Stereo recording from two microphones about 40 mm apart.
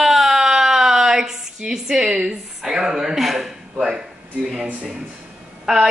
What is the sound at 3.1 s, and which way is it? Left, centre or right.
Speech, centre.